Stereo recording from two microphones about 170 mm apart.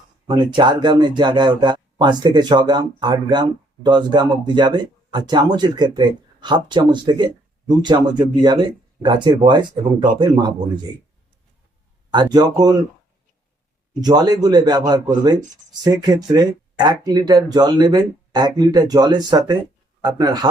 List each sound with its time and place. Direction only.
0.3 s speech: 25° right (ahead or behind)
12.1 s speech: 25° right (ahead or behind)
14.0 s speech: 25° right (ahead or behind)